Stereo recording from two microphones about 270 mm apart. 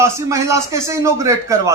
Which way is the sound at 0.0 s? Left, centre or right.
Centre.